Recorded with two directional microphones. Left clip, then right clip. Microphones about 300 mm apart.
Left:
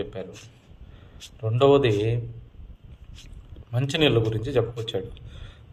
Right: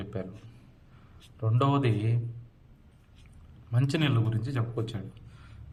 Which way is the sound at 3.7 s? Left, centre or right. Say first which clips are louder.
Left 9 dB; centre.